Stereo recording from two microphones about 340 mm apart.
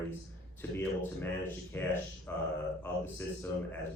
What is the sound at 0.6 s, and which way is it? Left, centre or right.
Speech, centre.